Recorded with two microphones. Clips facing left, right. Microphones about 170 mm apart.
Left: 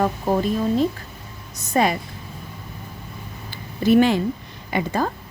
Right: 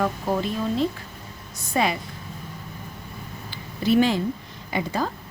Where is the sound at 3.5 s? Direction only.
50° left (ahead or behind).